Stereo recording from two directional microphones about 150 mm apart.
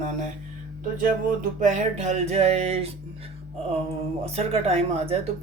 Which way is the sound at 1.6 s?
55° right (ahead or behind).